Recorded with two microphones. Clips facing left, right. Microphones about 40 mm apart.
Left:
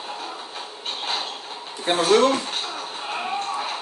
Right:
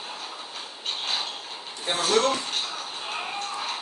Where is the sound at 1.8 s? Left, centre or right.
Left.